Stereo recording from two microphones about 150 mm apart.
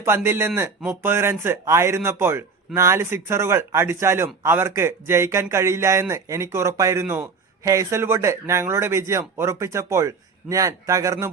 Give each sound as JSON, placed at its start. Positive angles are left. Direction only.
{"t": 0.0, "sound": "speech", "side_deg": -15}